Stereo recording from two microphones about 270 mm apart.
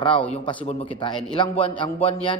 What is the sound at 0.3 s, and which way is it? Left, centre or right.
A man's voice, centre.